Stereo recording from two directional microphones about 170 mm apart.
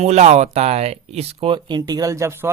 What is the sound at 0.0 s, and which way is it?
Speech, 40° right (ahead or behind).